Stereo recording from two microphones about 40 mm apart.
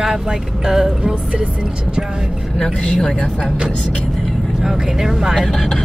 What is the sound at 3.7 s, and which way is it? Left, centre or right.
Speech, left.